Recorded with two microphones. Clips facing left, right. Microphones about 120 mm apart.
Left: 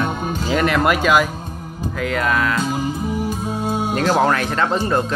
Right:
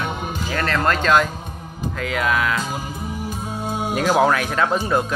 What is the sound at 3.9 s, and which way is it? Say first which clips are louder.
Speech: right 1 dB; 10° right (ahead or behind).